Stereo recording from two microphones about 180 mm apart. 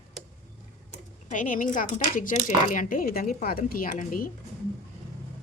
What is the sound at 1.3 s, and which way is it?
Speech, 45° left (ahead or behind).